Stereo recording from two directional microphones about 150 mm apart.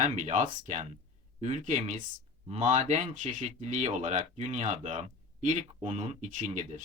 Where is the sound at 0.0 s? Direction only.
55° right (ahead or behind).